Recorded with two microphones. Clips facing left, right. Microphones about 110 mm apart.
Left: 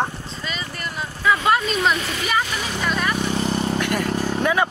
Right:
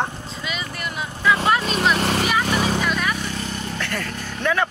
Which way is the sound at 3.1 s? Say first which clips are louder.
Left 6 dB; 30° left (ahead or behind).